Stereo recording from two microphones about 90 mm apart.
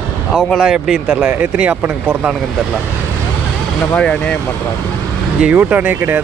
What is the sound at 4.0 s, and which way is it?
Speech, 10° left (ahead or behind).